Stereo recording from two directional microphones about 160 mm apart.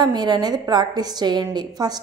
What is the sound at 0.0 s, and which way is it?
A woman's voice, 25° right (ahead or behind).